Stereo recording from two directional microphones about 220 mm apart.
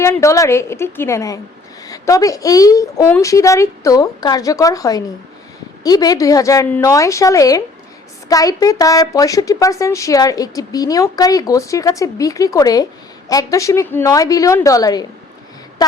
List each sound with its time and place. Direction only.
0.0 s a woman's voice: 15° left (ahead or behind)